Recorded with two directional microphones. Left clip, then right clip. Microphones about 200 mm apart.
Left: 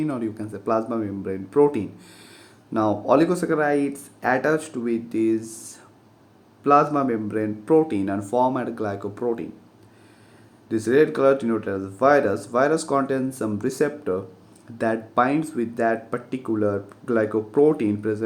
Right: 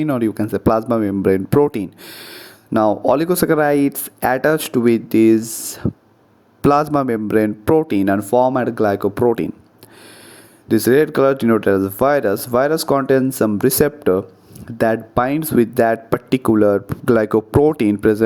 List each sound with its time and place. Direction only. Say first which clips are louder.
0.0 s speech: right 8 dB; 45° right (ahead or behind)
6.6 s speech: right 3 dB; 60° right (ahead or behind)
10.7 s speech: right 5 dB; 45° right (ahead or behind)